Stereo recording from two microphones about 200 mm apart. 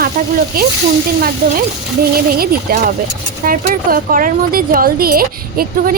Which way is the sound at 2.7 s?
50° right (ahead or behind).